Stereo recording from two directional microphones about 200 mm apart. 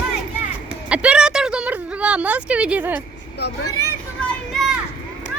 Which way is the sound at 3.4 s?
55° left (ahead or behind).